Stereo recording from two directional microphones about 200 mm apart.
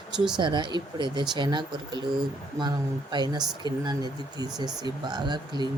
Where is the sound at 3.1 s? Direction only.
20° right (ahead or behind).